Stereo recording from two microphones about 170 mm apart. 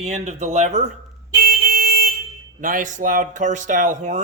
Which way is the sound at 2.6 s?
55° right (ahead or behind).